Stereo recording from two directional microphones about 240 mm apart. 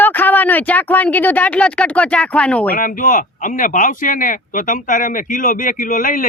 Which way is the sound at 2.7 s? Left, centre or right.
Left.